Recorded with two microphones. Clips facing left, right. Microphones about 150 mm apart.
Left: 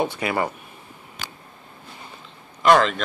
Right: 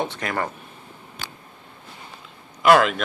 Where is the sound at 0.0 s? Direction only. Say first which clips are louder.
Left 3 dB; 10° left (ahead or behind).